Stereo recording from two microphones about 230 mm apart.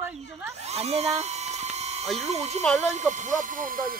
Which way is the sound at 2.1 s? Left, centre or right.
Right.